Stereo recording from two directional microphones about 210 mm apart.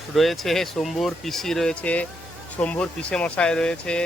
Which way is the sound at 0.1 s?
Centre (ahead or behind).